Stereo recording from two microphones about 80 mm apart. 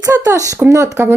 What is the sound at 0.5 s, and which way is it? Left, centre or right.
Speech, right.